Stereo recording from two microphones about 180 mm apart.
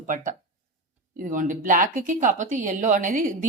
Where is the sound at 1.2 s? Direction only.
45° right (ahead or behind).